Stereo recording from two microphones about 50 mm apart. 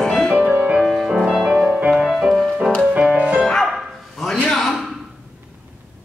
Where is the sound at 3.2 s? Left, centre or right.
Right.